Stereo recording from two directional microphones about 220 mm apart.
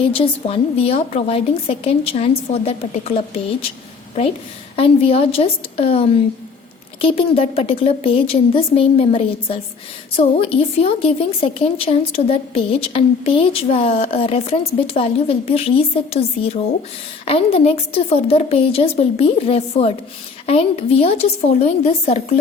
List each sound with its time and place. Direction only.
0.1 s a woman's voice: 25° left (ahead or behind)
4.8 s a woman's voice: 25° left (ahead or behind)